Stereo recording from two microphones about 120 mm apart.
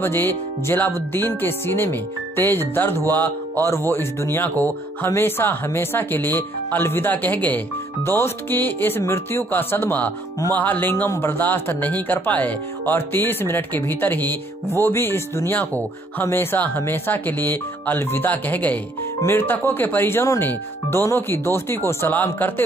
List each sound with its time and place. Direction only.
0.0 s speech: 20° left (ahead or behind)